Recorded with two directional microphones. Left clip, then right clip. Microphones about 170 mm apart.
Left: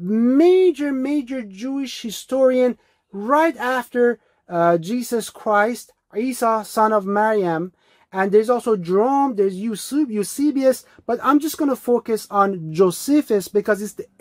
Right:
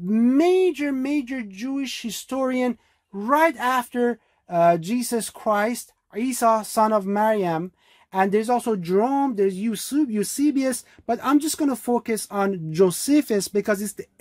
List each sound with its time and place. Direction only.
0.1 s speech: 15° right (ahead or behind)